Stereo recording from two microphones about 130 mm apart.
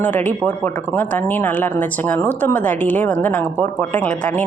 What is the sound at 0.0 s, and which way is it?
A woman's voice, 10° left (ahead or behind).